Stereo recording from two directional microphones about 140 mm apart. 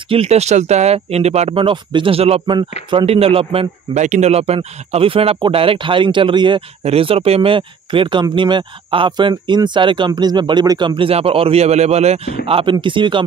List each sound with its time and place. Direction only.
0.1 s speech: 50° right (ahead or behind)